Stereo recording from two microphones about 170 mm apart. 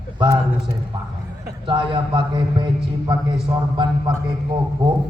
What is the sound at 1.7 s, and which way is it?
A man's voice, 30° right (ahead or behind).